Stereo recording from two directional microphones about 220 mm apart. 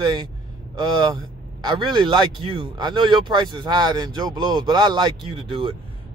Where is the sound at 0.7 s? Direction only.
20° right (ahead or behind).